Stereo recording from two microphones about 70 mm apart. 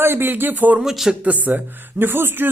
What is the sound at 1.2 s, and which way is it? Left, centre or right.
Speech, right.